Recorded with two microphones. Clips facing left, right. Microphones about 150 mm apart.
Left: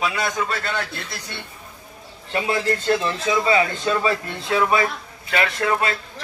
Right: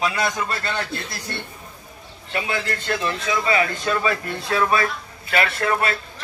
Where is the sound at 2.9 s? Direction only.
20° left (ahead or behind).